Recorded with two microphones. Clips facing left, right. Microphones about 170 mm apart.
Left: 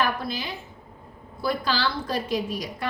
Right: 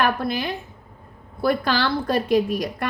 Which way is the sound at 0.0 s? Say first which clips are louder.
Right 5 dB; 60° right (ahead or behind).